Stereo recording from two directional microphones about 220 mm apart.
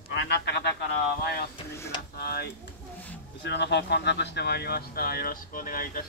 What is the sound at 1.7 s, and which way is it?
Speech, 10° left (ahead or behind).